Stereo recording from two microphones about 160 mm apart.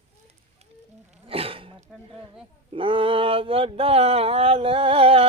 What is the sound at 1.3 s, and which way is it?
Throat clearing, 35° right (ahead or behind).